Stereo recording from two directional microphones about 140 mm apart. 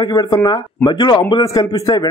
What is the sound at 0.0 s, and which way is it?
A man's voice, 30° left (ahead or behind).